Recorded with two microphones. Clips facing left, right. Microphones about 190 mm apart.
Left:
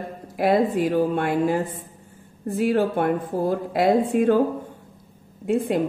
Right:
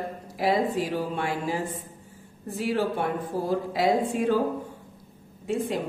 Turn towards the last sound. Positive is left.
turn(degrees=55)  # may be behind; listen again after turning